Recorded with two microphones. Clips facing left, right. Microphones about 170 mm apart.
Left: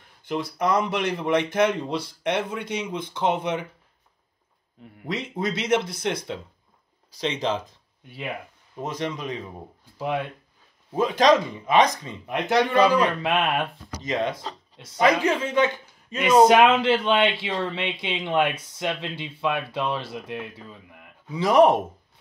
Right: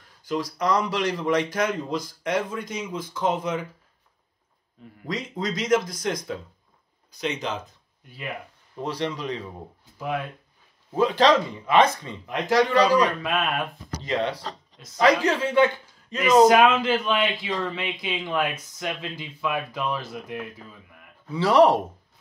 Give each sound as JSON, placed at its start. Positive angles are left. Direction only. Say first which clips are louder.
{"t": 0.3, "sound": "a man's voice", "louder": "even", "side_deg": 25}
{"t": 5.0, "sound": "a man's voice", "louder": "left 1 dB", "side_deg": 25}
{"t": 8.7, "sound": "speech", "louder": "right 1 dB", "side_deg": 15}
{"t": 9.9, "sound": "speech", "louder": "left 2 dB", "side_deg": 25}
{"t": 11.0, "sound": "speech", "louder": "even", "side_deg": 15}
{"t": 12.4, "sound": "a man's voice", "louder": "even", "side_deg": 25}
{"t": 15.4, "sound": "speech", "louder": "right 2 dB", "side_deg": 15}
{"t": 16.2, "sound": "a man's voice", "louder": "even", "side_deg": 25}
{"t": 21.3, "sound": "speech", "louder": "even", "side_deg": 15}